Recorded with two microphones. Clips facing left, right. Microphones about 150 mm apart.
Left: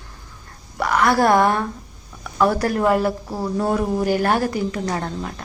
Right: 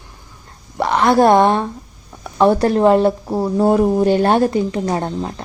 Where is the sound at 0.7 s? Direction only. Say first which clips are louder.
Right 4 dB; 25° right (ahead or behind).